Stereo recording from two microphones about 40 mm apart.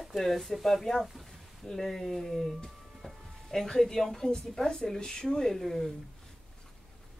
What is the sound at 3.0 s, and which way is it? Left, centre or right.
Music, centre.